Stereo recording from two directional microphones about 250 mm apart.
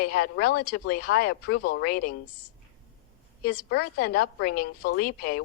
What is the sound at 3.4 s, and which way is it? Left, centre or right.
A woman's voice, left.